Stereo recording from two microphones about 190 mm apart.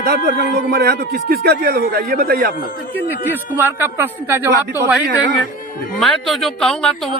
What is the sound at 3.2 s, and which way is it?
Speech, 10° right (ahead or behind).